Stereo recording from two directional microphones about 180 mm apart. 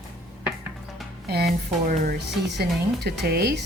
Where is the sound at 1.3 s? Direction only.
65° right (ahead or behind).